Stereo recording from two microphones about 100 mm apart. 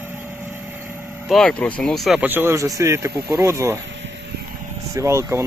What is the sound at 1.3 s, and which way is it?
Speech, 5° left (ahead or behind).